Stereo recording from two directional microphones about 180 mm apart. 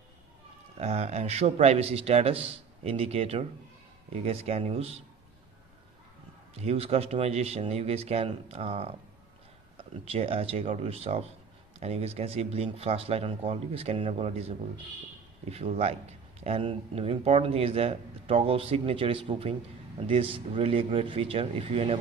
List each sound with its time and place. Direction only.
0.7 s speech: 35° right (ahead or behind)
6.5 s speech: 35° right (ahead or behind)
15.5 s speech: 35° right (ahead or behind)